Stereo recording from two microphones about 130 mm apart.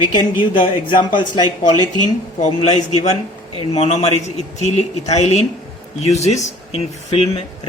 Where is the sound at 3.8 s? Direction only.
55° left (ahead or behind).